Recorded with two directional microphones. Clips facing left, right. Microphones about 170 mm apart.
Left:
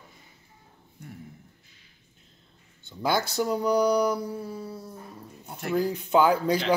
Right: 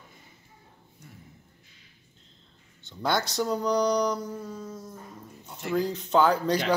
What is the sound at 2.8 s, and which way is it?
Speech, 10° left (ahead or behind).